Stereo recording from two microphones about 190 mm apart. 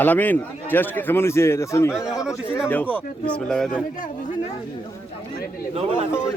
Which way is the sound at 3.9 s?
45° left (ahead or behind).